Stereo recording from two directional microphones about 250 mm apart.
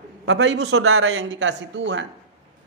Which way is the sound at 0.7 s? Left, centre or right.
Right.